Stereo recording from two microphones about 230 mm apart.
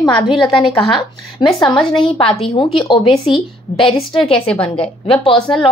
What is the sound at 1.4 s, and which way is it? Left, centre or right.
A woman's voice, centre.